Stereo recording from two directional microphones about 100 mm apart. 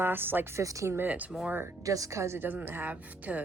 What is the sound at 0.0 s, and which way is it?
A woman's voice, 20° right (ahead or behind).